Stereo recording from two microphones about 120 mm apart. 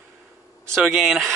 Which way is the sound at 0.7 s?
Centre (ahead or behind).